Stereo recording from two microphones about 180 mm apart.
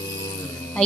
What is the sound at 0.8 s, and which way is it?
Music, 5° left (ahead or behind).